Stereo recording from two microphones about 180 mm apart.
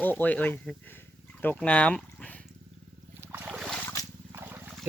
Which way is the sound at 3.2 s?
10° right (ahead or behind).